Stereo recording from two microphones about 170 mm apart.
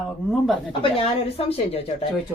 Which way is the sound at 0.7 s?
30° left (ahead or behind).